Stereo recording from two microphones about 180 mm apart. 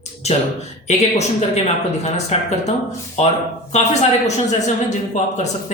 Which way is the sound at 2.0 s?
40° left (ahead or behind).